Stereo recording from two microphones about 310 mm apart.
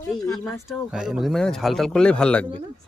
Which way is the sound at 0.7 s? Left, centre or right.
Centre.